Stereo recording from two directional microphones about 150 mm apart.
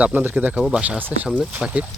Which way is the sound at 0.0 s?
10° right (ahead or behind).